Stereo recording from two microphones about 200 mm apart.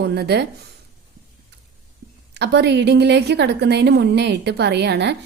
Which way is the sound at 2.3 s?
60° right (ahead or behind).